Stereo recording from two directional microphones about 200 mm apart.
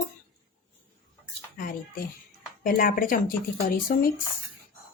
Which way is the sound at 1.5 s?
45° left (ahead or behind).